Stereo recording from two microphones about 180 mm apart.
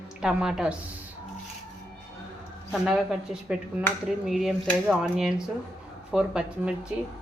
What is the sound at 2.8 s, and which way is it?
Speech, centre (ahead or behind).